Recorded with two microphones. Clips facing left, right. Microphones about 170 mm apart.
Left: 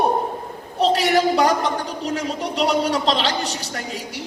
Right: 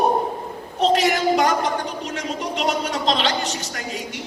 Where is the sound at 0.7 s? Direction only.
35° left (ahead or behind).